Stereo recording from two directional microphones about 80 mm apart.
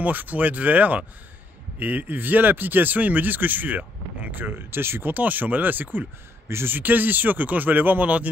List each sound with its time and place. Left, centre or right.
0.0 s speech: right